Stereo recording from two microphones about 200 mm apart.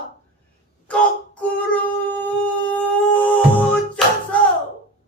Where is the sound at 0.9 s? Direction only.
5° left (ahead or behind).